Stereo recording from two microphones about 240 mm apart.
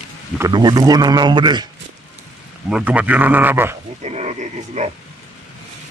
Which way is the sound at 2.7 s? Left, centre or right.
Centre.